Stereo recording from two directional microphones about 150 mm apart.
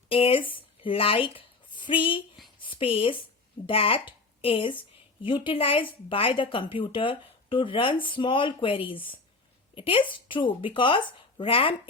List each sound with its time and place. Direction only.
0.1 s speech: 40° left (ahead or behind)
2.6 s a sound: 35° left (ahead or behind)
3.7 s speech: 40° left (ahead or behind)